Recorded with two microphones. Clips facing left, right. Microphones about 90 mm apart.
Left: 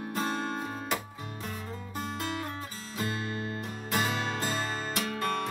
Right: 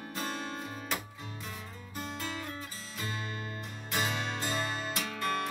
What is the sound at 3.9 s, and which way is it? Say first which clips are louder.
Music: left 3 dB; 40° left (ahead or behind).